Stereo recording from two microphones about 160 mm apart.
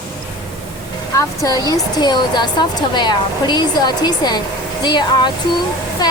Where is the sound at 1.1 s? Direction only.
20° left (ahead or behind).